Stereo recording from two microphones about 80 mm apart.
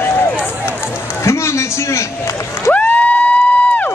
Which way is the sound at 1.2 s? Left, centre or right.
Left.